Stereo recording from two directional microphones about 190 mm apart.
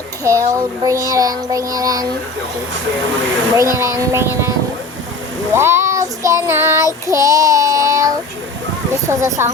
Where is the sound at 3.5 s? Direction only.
15° right (ahead or behind).